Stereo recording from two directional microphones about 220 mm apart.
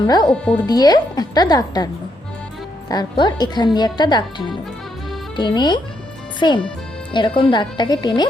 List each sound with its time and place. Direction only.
0.0 s speech: 20° left (ahead or behind)
2.9 s speech: 20° left (ahead or behind)